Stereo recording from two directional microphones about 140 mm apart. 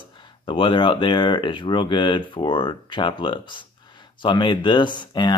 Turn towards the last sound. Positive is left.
turn(degrees=35)  # may be behind; listen again after turning